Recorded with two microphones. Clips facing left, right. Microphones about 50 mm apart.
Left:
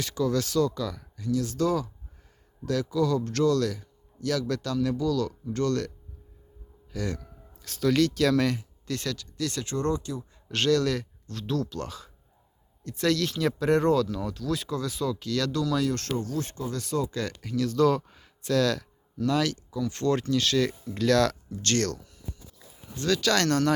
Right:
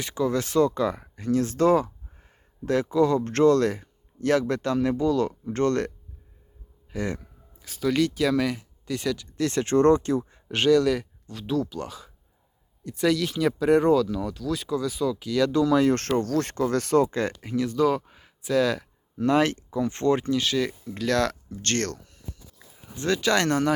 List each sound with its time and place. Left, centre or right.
0.0 s speech: right
6.9 s speech: right
7.6 s speech: centre
9.1 s speech: right
10.5 s speech: centre; by 17.1 s right
17.1 s speech: right
19.2 s speech: right; by 20.7 s centre
21.1 s a sound: right
23.0 s speech: right